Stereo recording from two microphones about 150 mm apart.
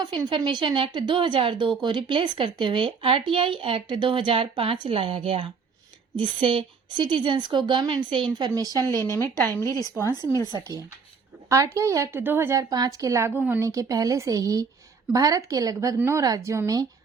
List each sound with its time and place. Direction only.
0.0 s speech: 30° right (ahead or behind)
9.0 s speech: 15° left (ahead or behind)
10.5 s a woman's voice: 25° right (ahead or behind)